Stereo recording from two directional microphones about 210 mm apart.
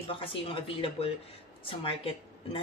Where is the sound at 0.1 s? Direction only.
25° left (ahead or behind).